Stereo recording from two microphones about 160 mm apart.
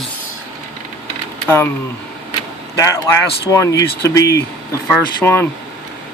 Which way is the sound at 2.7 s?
20° left (ahead or behind).